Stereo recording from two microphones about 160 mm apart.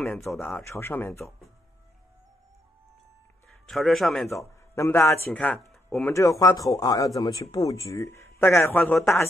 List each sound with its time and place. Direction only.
0.0 s speech: centre (ahead or behind)
0.4 s speech: 15° left (ahead or behind)
3.6 s speech: centre (ahead or behind)
4.3 s speech: 20° left (ahead or behind)
5.7 s a sound: centre (ahead or behind)
6.0 s speech: 20° left (ahead or behind)